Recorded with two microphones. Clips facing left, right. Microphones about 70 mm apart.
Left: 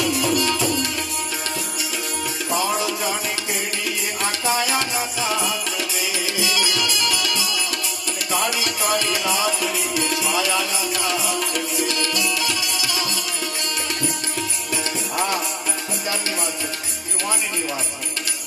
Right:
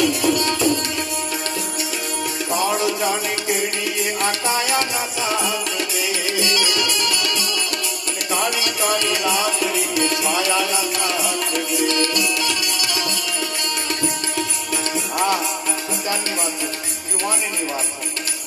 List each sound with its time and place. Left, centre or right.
0.0 s music: right
2.5 s music: right
4.2 s music: right
6.4 s music: right
8.5 s music: right